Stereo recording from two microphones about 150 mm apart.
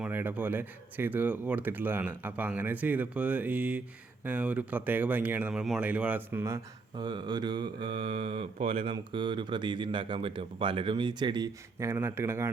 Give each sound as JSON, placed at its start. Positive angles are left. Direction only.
{"t": 0.0, "sound": "speech", "side_deg": -15}
{"t": 6.9, "sound": "mantra", "side_deg": -30}